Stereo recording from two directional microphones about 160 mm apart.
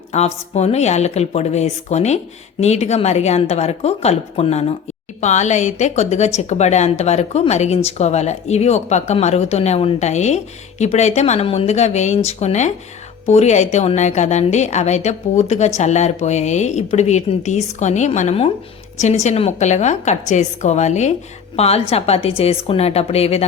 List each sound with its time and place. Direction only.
0.1 s a woman's voice: 45° left (ahead or behind)